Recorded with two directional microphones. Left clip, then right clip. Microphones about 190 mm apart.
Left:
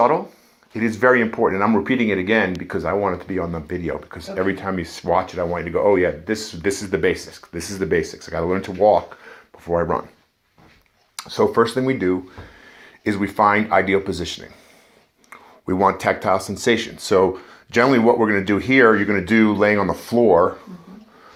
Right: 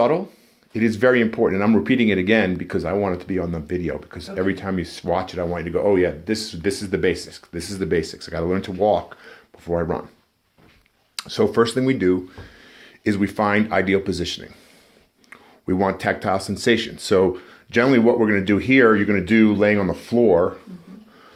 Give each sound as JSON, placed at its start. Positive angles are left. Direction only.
{"t": 0.7, "sound": "speech", "side_deg": -60}
{"t": 11.2, "sound": "speech", "side_deg": -40}